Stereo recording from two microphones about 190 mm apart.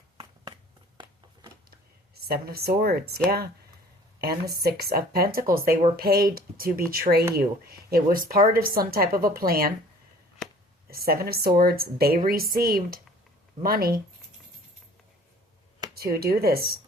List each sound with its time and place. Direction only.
0.9 s a sound: 25° right (ahead or behind)
2.1 s speech: 55° right (ahead or behind)
4.2 s speech: 55° right (ahead or behind)
10.8 s speech: 50° right (ahead or behind)
16.0 s speech: 55° right (ahead or behind)